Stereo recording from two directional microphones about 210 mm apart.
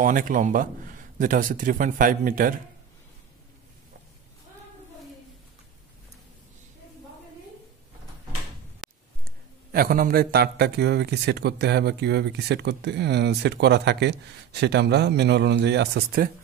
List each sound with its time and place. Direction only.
0.0 s a man's voice: 40° right (ahead or behind)
8.8 s a sound: centre (ahead or behind)
9.7 s a man's voice: 45° right (ahead or behind)